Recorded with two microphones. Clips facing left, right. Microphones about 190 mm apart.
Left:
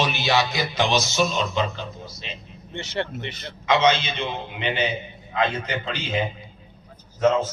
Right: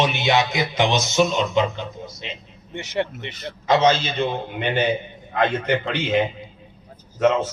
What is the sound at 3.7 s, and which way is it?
A man's voice, 40° right (ahead or behind).